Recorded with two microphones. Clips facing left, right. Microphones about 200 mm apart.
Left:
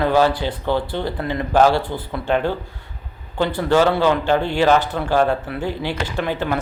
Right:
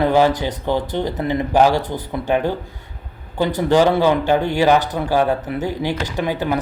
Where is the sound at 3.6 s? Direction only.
15° right (ahead or behind).